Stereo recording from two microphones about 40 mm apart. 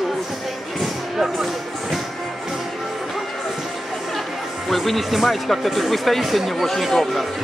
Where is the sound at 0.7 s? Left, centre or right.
Centre.